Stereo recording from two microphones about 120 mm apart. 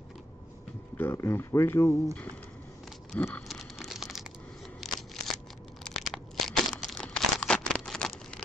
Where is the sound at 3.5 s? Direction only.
Centre (ahead or behind).